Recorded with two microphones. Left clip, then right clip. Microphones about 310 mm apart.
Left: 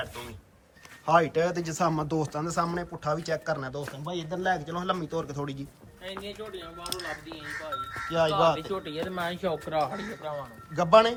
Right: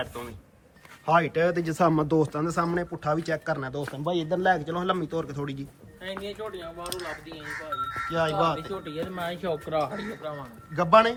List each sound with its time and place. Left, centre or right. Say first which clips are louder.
1.0 s speech: right 1 dB; centre
6.0 s speech: right 3 dB; centre
6.8 s speech: left 1 dB; centre
8.7 s speech: left 1 dB; left
10.8 s speech: right 1 dB; centre